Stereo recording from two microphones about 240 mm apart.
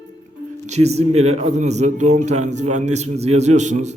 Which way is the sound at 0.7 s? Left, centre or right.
Right.